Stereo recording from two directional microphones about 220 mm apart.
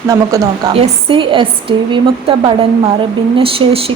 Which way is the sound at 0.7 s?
25° right (ahead or behind).